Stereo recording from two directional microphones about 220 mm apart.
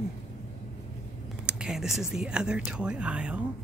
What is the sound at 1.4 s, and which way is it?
Speech, 5° right (ahead or behind).